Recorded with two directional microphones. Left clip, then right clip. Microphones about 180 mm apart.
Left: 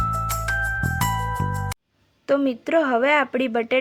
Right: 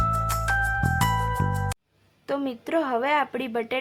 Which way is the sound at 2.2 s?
20° left (ahead or behind).